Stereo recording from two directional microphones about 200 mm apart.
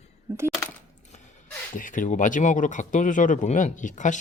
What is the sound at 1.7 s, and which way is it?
Speech, 40° left (ahead or behind).